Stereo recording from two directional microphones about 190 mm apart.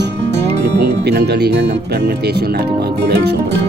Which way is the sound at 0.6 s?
60° right (ahead or behind).